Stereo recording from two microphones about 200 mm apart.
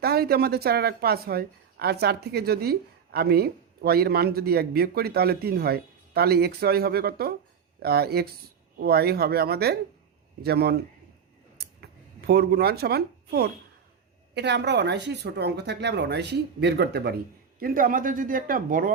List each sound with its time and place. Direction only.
0.0 s a woman's voice: 50° right (ahead or behind)
11.5 s a sound: 55° right (ahead or behind)
14.3 s a woman's voice: 60° right (ahead or behind)